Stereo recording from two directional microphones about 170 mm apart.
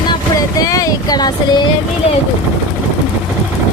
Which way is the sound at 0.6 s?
20° left (ahead or behind).